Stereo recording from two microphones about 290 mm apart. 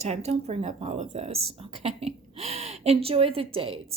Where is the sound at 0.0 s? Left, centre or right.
Right.